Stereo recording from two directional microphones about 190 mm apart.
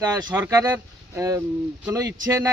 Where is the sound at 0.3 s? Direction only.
10° right (ahead or behind).